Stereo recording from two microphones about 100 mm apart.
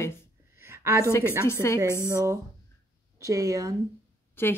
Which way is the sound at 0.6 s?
25° right (ahead or behind).